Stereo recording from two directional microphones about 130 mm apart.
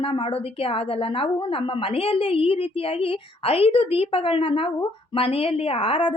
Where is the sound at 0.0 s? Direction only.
45° left (ahead or behind).